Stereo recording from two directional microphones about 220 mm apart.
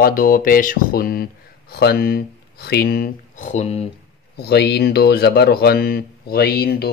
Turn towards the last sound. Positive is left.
turn(degrees=45)  # may be behind; listen again after turning